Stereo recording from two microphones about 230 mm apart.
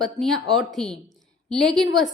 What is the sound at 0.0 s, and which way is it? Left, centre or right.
A woman's voice, centre.